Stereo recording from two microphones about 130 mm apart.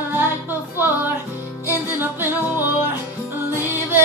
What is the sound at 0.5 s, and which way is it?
Music, 15° right (ahead or behind).